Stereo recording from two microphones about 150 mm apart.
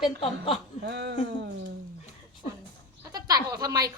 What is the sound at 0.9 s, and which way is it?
Speech, 90° right.